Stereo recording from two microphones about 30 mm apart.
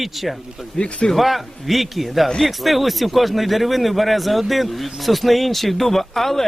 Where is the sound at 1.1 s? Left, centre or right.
Centre.